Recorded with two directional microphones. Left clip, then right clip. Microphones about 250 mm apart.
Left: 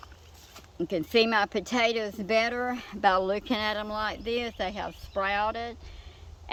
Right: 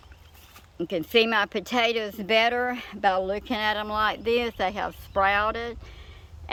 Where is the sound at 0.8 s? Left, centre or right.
Centre.